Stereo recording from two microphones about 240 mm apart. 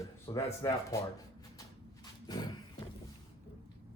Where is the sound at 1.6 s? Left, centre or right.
Centre.